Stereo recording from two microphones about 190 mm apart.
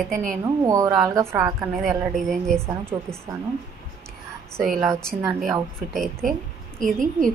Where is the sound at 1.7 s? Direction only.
Centre (ahead or behind).